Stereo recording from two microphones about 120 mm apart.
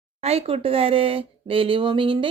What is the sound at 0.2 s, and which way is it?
A woman's voice, 60° right (ahead or behind).